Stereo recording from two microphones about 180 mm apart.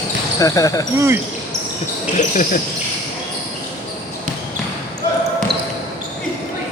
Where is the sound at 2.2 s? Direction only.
45° left (ahead or behind).